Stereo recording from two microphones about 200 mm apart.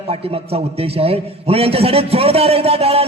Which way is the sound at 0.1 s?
30° right (ahead or behind).